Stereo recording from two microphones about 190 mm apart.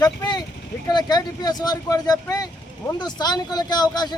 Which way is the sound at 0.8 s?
20° left (ahead or behind).